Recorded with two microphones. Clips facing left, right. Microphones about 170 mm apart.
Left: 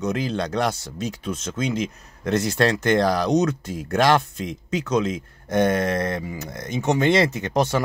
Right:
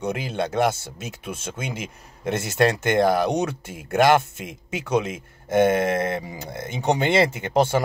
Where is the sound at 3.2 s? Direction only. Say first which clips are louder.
Left 3 dB; 10° right (ahead or behind).